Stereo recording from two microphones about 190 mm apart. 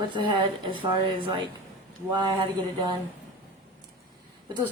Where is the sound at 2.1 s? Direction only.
20° right (ahead or behind).